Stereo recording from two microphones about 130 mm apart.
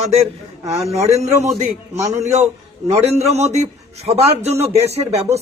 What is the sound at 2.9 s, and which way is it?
A man's voice, 55° right (ahead or behind).